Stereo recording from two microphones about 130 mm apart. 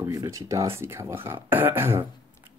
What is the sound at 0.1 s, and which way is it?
Speech, 25° right (ahead or behind).